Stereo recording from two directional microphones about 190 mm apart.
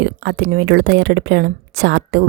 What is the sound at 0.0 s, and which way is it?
Speech, 65° right (ahead or behind).